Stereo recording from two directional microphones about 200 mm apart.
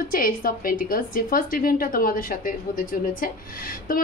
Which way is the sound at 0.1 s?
45° left (ahead or behind).